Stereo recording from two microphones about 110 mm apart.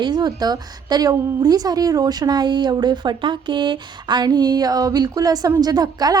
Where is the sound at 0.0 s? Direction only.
40° right (ahead or behind).